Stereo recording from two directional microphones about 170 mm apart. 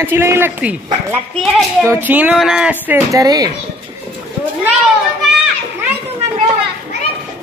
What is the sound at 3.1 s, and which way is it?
Speech, 20° right (ahead or behind).